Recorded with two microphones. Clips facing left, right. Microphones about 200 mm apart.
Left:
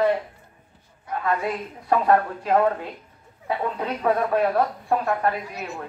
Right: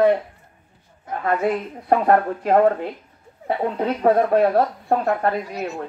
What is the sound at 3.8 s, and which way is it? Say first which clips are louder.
Speech: right 7 dB; 35° right (ahead or behind).